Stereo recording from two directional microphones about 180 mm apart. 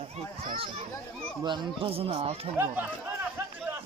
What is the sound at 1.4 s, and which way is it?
Speech, 25° right (ahead or behind).